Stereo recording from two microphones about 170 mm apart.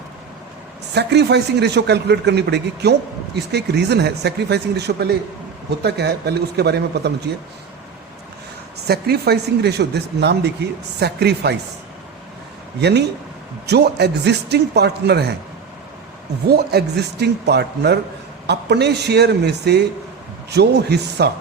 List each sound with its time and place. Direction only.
0.9 s a man's voice: 80° right
8.9 s speech: 70° right (ahead or behind)
12.8 s a man's voice: 80° right
16.5 s speech: 70° right (ahead or behind)